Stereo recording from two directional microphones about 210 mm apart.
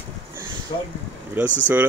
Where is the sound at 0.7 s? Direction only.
30° left (ahead or behind).